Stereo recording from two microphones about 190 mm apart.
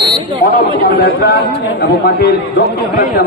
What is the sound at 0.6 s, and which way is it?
A man's voice, 55° left (ahead or behind).